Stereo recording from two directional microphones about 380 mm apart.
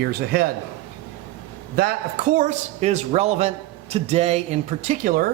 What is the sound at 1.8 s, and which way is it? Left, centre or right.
A man's voice, right.